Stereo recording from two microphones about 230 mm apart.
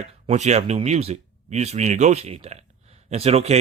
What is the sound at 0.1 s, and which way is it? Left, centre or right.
Speech, right.